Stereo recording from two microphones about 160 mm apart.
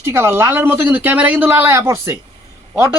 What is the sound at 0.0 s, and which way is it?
Speech, 15° right (ahead or behind).